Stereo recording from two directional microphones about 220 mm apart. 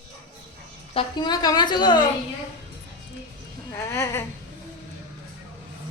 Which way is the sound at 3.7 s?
10° left (ahead or behind).